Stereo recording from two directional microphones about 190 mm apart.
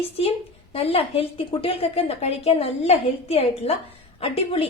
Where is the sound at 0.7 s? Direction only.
30° left (ahead or behind).